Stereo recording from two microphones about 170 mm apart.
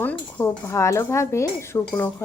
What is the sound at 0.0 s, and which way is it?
A woman's voice, 10° left (ahead or behind).